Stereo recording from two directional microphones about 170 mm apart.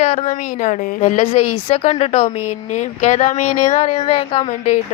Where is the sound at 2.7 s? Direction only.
45° left (ahead or behind).